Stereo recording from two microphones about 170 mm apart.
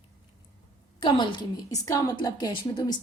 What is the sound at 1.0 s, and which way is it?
A woman's voice, 30° left (ahead or behind).